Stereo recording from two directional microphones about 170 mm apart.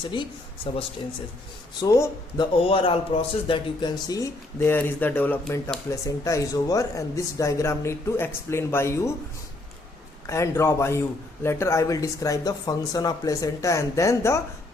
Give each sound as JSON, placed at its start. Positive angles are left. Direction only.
{"t": 0.1, "sound": "speech", "side_deg": 30}
{"t": 1.8, "sound": "speech", "side_deg": 20}
{"t": 2.6, "sound": "speech", "side_deg": 30}
{"t": 10.2, "sound": "speech", "side_deg": 15}